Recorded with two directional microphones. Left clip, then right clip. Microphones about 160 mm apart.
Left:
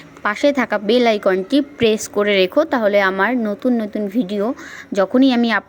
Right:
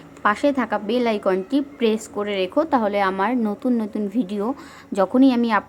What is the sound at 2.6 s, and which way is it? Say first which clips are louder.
A woman's voice: left 4 dB; 10° left (ahead or behind).